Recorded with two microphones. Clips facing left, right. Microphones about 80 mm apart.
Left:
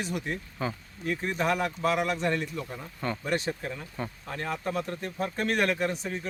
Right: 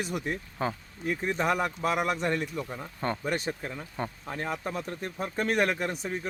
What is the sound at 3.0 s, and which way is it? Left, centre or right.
Speech, right.